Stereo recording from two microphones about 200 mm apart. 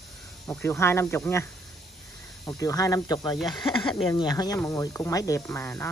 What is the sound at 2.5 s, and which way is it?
Speech, 15° left (ahead or behind).